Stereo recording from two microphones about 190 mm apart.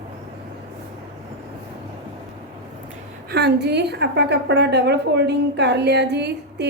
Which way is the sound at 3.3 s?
60° right (ahead or behind).